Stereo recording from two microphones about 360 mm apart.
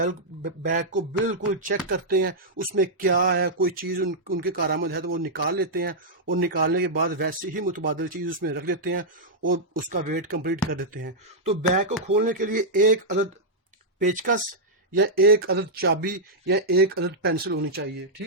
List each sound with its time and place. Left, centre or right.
0.0 s speech: right